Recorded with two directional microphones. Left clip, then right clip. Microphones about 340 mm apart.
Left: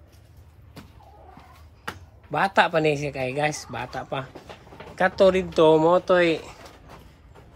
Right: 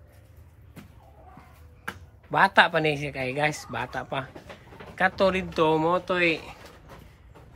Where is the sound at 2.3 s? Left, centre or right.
Centre.